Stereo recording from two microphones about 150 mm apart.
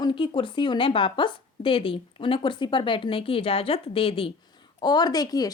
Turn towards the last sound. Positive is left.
turn(degrees=25)  # may be behind; listen again after turning